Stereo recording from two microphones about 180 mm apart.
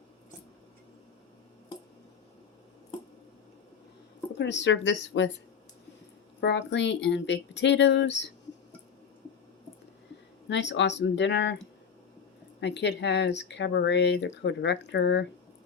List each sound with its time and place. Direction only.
4.4 s speech: 80° left
6.4 s speech: 75° left (ahead or behind)
10.5 s speech: 80° left